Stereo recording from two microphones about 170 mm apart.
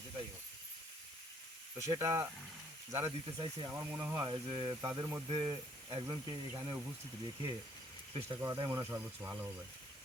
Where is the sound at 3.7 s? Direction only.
15° right (ahead or behind).